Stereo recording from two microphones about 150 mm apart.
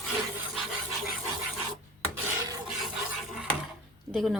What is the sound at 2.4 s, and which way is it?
Filing, 25° right (ahead or behind).